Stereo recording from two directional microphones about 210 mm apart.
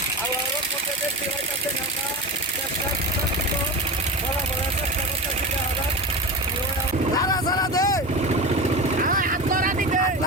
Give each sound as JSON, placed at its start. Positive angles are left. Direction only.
{"t": 7.2, "sound": "vehicle", "side_deg": 20}
{"t": 9.0, "sound": "vehicle", "side_deg": -40}